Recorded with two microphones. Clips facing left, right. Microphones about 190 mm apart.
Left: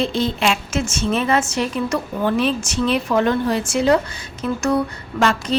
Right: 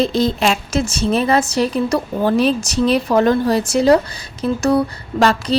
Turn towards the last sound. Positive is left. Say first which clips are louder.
# right 3 dB
turn(degrees=-35)  # may be behind; listen again after turning